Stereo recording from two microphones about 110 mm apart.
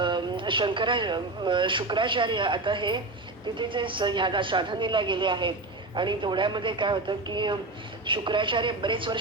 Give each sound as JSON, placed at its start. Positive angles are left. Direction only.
{"t": 0.0, "sound": "a woman's voice", "side_deg": -50}